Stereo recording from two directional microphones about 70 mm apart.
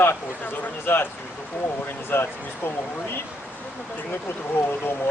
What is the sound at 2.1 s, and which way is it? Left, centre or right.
Speech, left.